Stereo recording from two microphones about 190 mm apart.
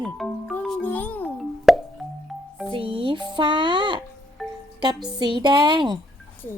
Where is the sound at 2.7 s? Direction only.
30° right (ahead or behind).